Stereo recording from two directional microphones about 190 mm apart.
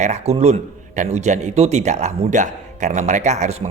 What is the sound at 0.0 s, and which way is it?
A man's voice, 35° right (ahead or behind).